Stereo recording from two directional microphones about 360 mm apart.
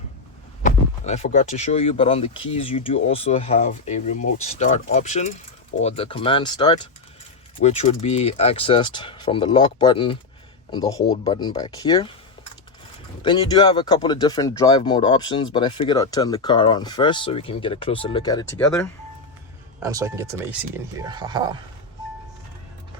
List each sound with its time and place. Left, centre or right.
0.6 s speech: centre
13.2 s speech: centre
19.8 s speech: centre